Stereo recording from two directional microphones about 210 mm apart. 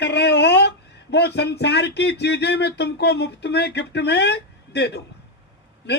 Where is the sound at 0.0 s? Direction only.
55° left (ahead or behind).